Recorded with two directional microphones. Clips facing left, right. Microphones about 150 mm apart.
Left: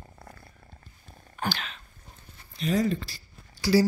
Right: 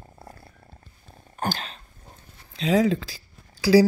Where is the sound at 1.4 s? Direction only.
40° right (ahead or behind).